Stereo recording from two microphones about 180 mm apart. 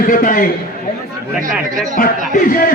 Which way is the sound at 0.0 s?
50° left (ahead or behind).